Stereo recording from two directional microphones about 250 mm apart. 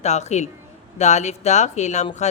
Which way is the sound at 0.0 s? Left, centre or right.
Left.